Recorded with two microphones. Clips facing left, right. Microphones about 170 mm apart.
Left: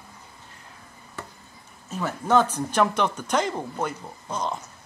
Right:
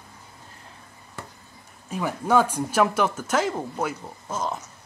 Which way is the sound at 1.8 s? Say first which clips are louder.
Right 1 dB; 10° right (ahead or behind).